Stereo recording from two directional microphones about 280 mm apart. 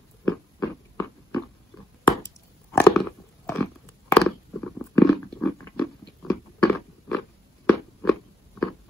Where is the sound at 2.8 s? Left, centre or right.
Centre.